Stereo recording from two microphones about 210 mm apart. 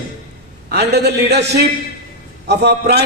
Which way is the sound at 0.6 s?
50° right (ahead or behind).